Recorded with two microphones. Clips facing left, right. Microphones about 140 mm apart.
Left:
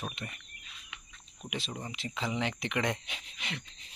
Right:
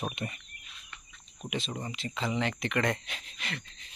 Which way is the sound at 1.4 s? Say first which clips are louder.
Right 3 dB; 5° left (ahead or behind).